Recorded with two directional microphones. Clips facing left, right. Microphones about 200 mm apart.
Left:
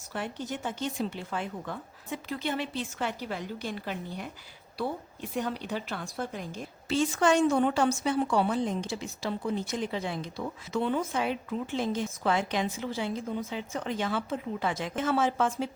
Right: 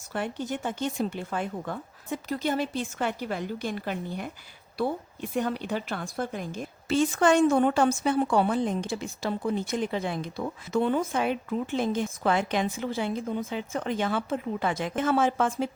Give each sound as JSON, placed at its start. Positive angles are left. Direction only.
{"t": 0.1, "sound": "speech", "side_deg": -50}
{"t": 5.4, "sound": "speech", "side_deg": -50}